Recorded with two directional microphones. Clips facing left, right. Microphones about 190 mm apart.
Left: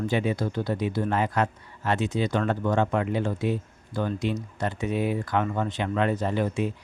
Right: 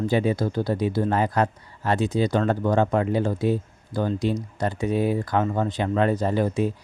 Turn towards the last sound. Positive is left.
turn(degrees=-40)  # may be behind; listen again after turning